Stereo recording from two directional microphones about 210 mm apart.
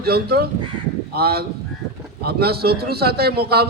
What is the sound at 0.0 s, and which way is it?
A man's voice, 50° right (ahead or behind).